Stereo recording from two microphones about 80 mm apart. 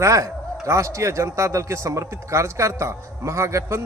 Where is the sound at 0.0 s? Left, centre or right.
Right.